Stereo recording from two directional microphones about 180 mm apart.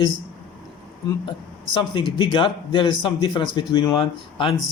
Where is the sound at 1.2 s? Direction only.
25° left (ahead or behind).